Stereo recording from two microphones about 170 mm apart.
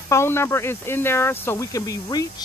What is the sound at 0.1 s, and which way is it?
Speech, 15° left (ahead or behind).